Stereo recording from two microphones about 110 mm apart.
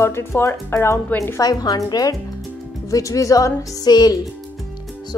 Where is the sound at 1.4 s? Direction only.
35° left (ahead or behind).